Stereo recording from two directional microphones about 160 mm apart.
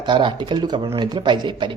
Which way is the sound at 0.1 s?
30° right (ahead or behind).